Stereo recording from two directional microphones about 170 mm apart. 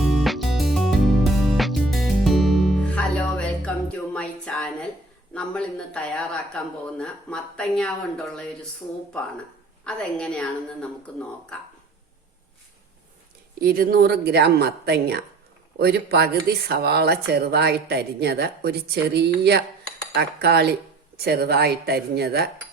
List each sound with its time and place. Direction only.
0.0 s music: centre (ahead or behind)
4.1 s a sound: 5° left (ahead or behind)
5.3 s speech: 5° left (ahead or behind)
9.8 s speech: 5° left (ahead or behind)
13.6 s speech: 65° right (ahead or behind)